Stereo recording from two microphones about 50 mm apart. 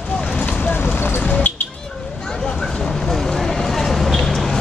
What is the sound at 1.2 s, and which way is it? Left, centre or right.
Speech, left.